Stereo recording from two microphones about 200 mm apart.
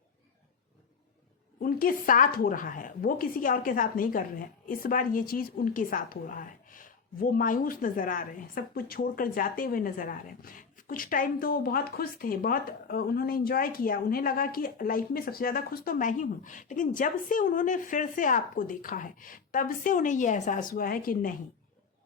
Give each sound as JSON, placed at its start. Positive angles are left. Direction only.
{"t": 1.6, "sound": "a woman's voice", "side_deg": 45}